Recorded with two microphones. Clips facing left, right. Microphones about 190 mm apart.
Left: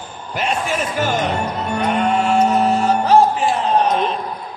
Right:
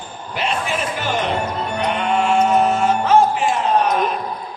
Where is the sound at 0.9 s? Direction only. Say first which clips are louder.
Left 2 dB; 45° left (ahead or behind).